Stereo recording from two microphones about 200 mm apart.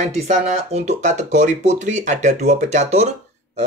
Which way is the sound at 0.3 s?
35° right (ahead or behind).